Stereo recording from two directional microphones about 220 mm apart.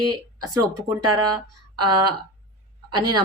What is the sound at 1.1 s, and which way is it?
Speech, 20° right (ahead or behind).